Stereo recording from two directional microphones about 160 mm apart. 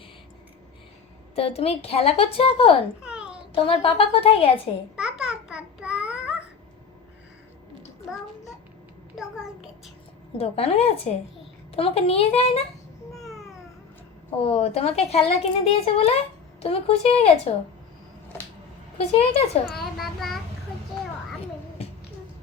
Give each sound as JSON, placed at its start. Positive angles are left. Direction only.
{"t": 1.4, "sound": "speech", "side_deg": 40}
{"t": 3.0, "sound": "babbling", "side_deg": -5}
{"t": 3.5, "sound": "speech", "side_deg": 35}
{"t": 4.9, "sound": "babbling", "side_deg": -5}
{"t": 9.1, "sound": "a sound", "side_deg": 0}
{"t": 10.3, "sound": "speech", "side_deg": 40}
{"t": 13.1, "sound": "babbling", "side_deg": 0}
{"t": 14.4, "sound": "speech", "side_deg": 40}
{"t": 18.9, "sound": "speech", "side_deg": 40}
{"t": 19.8, "sound": "child singing", "side_deg": 0}